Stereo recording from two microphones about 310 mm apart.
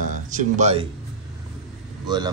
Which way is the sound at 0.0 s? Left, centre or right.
Right.